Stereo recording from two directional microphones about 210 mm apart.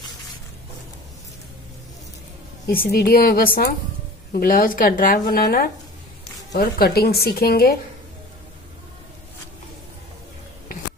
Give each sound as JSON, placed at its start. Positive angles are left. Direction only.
{"t": 2.6, "sound": "speech", "side_deg": 50}